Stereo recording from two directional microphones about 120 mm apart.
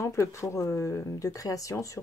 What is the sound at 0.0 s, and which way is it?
Speech, 25° left (ahead or behind).